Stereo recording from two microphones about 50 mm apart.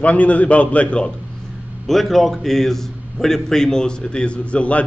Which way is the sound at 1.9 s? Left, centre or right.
Centre.